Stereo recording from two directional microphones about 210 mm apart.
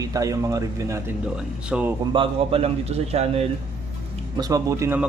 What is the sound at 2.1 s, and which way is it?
Speech, 25° right (ahead or behind).